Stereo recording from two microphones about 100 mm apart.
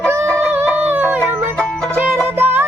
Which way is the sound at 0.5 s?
20° right (ahead or behind).